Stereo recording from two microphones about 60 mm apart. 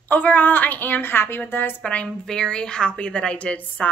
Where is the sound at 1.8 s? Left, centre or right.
Left.